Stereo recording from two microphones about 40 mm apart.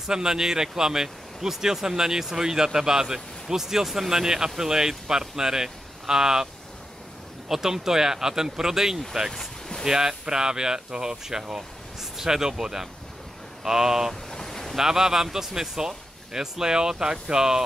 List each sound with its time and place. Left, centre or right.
0.0 s speech: centre
9.3 s a sound: centre
9.8 s speech: centre
14.3 s boat: centre
14.8 s speech: centre